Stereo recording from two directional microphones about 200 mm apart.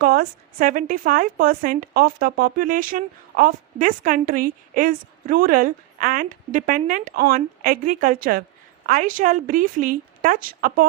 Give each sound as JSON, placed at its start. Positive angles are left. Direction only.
{"t": 0.0, "sound": "a woman's voice", "side_deg": -45}